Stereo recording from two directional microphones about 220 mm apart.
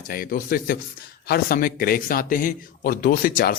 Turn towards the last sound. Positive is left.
turn(degrees=45)  # may be behind; listen again after turning